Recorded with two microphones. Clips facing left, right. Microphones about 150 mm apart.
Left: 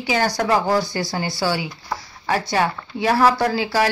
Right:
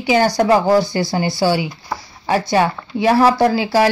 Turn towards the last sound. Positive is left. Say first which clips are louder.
# right 5 dB
turn(degrees=-25)  # may be behind; listen again after turning